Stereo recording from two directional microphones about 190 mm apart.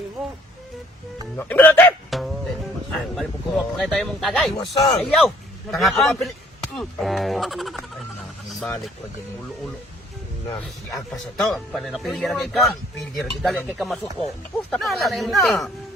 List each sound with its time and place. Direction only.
1.4 s speech: 10° left (ahead or behind)
2.0 s music: centre (ahead or behind)
2.9 s speech: centre (ahead or behind)
4.5 s speech: 25° left (ahead or behind)
5.7 s speech: centre (ahead or behind)
8.4 s vehicle: 5° left (ahead or behind)
10.9 s speech: centre (ahead or behind)